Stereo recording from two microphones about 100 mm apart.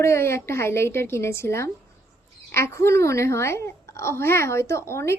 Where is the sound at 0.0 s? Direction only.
30° left (ahead or behind).